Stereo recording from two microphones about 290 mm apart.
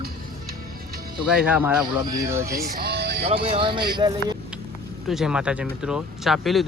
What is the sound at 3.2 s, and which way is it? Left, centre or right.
Speech, centre.